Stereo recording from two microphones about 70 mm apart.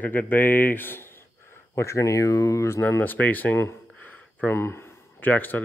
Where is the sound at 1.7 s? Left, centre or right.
Left.